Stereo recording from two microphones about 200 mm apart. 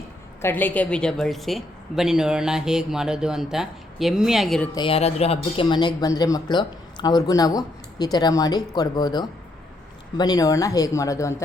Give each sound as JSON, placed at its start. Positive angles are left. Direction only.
{"t": 0.4, "sound": "a woman's voice", "side_deg": 10}
{"t": 4.7, "sound": "speech", "side_deg": 25}